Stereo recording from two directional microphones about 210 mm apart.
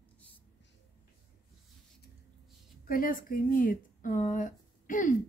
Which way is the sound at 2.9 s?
40° left (ahead or behind).